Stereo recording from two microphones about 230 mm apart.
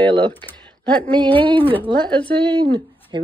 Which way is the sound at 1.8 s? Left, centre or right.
Centre.